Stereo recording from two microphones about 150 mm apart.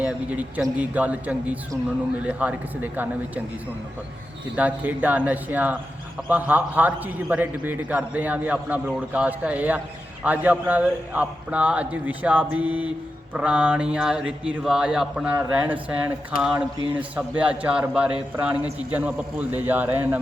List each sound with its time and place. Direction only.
0.0 s a man's voice: 10° right (ahead or behind)
4.5 s a man's voice: 10° right (ahead or behind)